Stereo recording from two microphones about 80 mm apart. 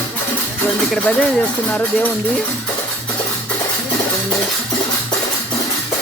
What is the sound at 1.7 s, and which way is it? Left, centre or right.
Speech, left.